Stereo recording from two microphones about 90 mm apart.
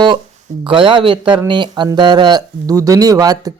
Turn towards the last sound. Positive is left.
turn(degrees=-45)  # may be behind; listen again after turning